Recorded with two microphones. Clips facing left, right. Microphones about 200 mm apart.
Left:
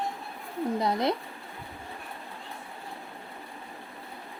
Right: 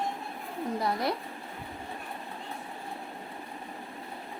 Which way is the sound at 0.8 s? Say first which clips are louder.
Left 3 dB; 20° left (ahead or behind).